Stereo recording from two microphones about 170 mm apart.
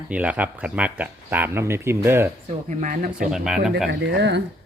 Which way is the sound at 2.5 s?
35° right (ahead or behind).